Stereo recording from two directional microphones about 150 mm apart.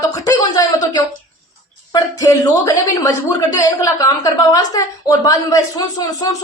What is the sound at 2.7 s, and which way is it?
A woman's voice, 20° left (ahead or behind).